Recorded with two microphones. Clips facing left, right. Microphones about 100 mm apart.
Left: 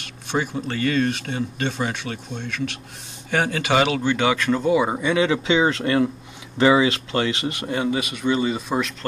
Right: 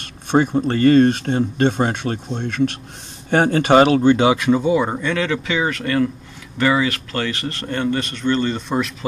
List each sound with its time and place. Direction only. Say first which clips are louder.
0.3 s speech: right 8 dB; 50° right (ahead or behind)
4.2 s speech: right 5 dB; 25° right (ahead or behind)
4.5 s speech: right 3 dB; centre (ahead or behind)